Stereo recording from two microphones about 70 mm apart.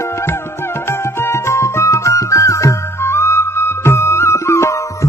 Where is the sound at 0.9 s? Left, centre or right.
Left.